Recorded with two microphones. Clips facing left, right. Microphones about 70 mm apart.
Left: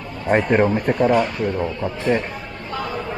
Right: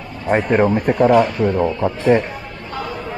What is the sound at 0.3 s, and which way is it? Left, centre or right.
Speech, centre.